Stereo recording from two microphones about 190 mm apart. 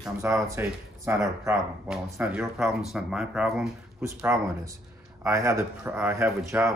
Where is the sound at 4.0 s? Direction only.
15° right (ahead or behind).